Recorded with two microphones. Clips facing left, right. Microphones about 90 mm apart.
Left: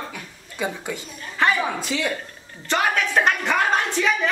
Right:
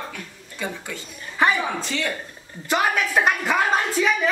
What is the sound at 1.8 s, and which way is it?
Speech, 15° left (ahead or behind).